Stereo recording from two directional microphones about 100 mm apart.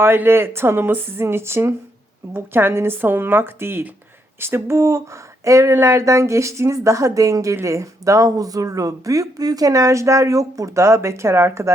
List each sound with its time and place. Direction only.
0.0 s speech: 25° right (ahead or behind)